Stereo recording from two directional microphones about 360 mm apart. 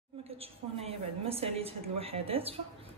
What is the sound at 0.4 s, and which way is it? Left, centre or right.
A woman's voice, centre.